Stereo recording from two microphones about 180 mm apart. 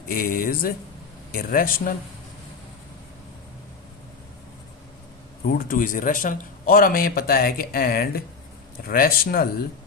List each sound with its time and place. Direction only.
0.1 s a man's voice: 55° left (ahead or behind)
5.5 s a man's voice: 50° left (ahead or behind)